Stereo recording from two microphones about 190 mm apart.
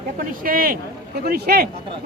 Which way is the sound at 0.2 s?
50° right (ahead or behind).